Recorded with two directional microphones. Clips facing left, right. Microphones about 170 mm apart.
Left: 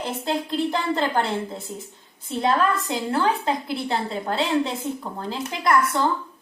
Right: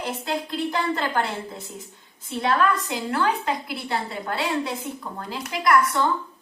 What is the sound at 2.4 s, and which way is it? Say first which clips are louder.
A woman's voice: left 1 dB; 30° left (ahead or behind).